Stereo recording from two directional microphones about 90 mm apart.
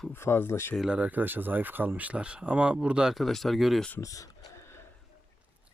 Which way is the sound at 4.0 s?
35° left (ahead or behind).